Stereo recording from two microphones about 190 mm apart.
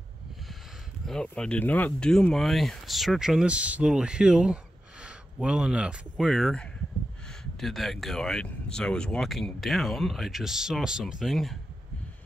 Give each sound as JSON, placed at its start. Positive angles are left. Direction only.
{"t": 1.0, "sound": "speech", "side_deg": 5}